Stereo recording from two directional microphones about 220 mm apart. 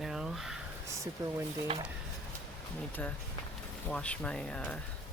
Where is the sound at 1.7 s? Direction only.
25° right (ahead or behind).